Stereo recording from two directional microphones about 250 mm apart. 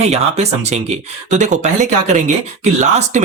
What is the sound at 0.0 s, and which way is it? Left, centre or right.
Speech, right.